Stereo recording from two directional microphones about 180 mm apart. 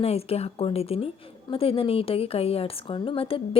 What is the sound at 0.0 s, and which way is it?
A woman's voice, 35° left (ahead or behind).